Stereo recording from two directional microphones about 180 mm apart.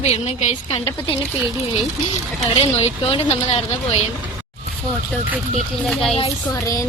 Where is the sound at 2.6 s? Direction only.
35° left (ahead or behind).